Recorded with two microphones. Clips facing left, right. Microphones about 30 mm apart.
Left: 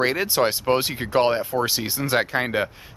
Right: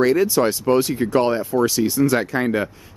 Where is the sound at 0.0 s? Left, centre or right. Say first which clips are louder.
Right 4 dB; left.